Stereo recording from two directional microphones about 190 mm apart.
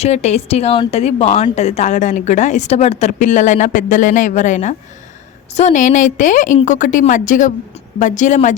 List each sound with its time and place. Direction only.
0.0 s a woman's voice: 35° left (ahead or behind)